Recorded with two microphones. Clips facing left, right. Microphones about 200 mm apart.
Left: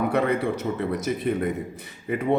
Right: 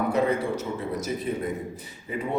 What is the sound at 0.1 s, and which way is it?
A man's voice, 65° left (ahead or behind).